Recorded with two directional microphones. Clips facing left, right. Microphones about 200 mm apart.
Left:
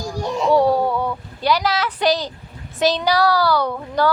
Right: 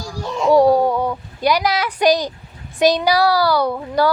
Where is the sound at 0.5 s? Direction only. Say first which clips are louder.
Right 4 dB; 15° right (ahead or behind).